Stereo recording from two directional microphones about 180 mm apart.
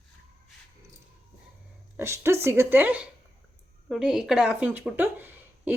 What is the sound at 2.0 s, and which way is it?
A woman's voice, 15° right (ahead or behind).